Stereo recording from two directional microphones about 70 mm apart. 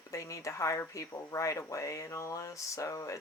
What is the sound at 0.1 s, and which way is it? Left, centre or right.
Speech, left.